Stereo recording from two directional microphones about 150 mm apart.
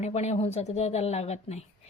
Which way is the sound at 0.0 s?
50° left (ahead or behind).